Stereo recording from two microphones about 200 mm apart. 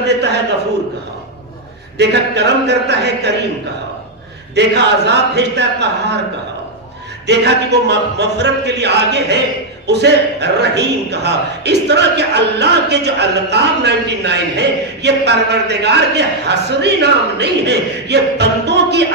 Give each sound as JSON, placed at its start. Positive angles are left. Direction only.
{"t": 2.0, "sound": "a man's voice", "side_deg": -60}
{"t": 4.6, "sound": "a man's voice", "side_deg": -60}
{"t": 7.2, "sound": "a man's voice", "side_deg": -55}